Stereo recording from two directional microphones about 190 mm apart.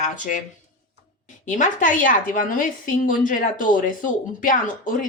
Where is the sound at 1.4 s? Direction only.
40° left (ahead or behind).